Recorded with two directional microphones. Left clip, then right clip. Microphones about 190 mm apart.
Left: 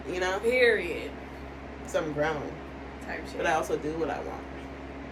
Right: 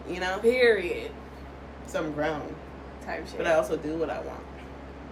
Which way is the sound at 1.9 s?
10° left (ahead or behind).